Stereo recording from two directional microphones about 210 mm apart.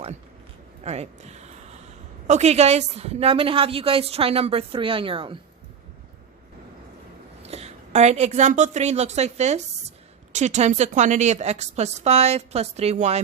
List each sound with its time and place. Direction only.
0.9 s a woman's voice: 30° right (ahead or behind)
7.4 s a woman's voice: 30° right (ahead or behind)